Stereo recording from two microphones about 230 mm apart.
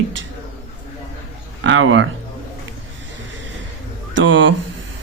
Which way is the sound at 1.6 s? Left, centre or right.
Right.